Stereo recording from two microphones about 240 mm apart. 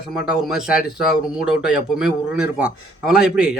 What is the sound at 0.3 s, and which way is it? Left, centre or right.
Speech, centre.